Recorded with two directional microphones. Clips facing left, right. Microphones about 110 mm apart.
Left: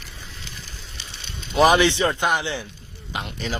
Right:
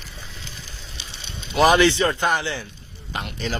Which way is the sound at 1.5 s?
15° left (ahead or behind).